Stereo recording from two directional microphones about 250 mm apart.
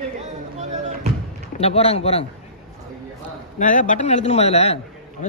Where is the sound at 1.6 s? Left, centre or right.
Left.